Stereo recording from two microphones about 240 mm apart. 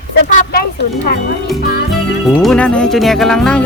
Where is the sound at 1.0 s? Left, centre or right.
Left.